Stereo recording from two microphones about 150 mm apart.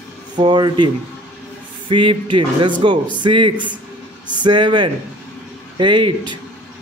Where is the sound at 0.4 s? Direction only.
30° right (ahead or behind).